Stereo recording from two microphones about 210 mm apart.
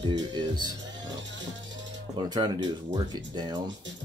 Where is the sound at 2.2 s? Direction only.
20° right (ahead or behind).